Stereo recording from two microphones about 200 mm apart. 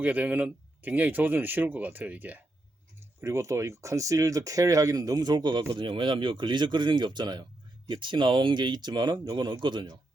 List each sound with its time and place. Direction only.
0.0 s speech: 10° right (ahead or behind)